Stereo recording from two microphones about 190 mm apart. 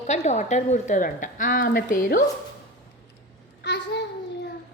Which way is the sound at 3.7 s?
65° left (ahead or behind).